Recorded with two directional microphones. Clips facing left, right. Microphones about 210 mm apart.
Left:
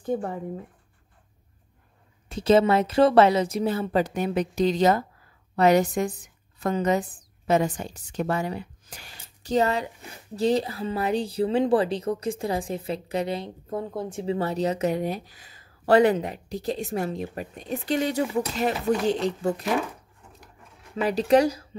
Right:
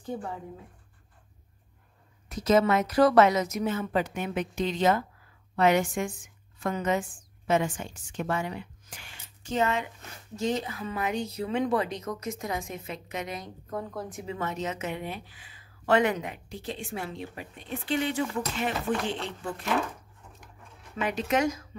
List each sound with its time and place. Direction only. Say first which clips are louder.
2.2 s a woman's voice: left 4 dB; 30° left (ahead or behind)
20.9 s speech: left 8 dB; 35° left (ahead or behind)